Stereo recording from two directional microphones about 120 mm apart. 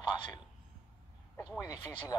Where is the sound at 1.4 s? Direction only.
25° left (ahead or behind).